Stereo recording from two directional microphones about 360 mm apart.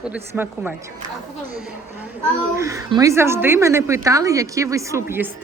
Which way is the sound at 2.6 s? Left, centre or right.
Centre.